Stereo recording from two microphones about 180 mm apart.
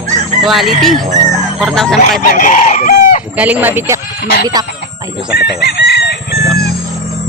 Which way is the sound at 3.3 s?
10° right (ahead or behind).